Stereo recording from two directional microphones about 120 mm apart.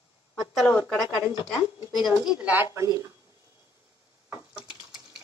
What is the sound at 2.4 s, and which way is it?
Speech, 10° right (ahead or behind).